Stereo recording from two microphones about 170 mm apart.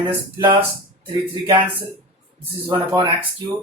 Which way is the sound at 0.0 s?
30° right (ahead or behind).